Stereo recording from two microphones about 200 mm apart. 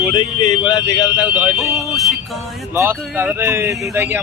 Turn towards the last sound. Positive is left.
turn(degrees=-10)  # may be behind; listen again after turning